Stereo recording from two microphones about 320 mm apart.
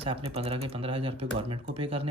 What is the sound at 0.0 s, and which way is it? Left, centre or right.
Speech, centre.